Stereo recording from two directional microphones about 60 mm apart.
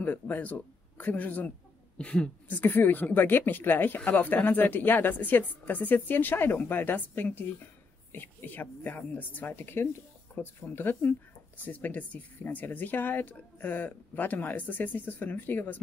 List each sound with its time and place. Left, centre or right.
0.0 s speech: left
2.0 s speech: centre
2.5 s speech: left